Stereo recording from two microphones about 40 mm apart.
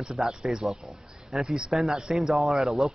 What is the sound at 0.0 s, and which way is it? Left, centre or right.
Speech, centre.